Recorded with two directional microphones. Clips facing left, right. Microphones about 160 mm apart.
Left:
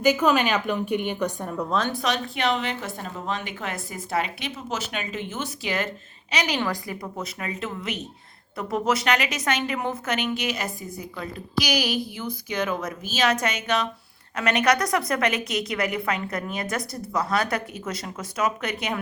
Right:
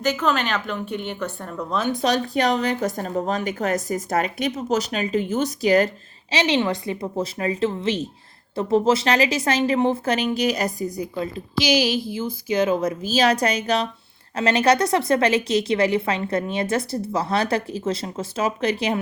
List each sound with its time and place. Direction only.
0.0 s a woman's voice: 10° left (ahead or behind)
2.0 s a woman's voice: 35° right (ahead or behind)
6.3 s a woman's voice: 25° right (ahead or behind)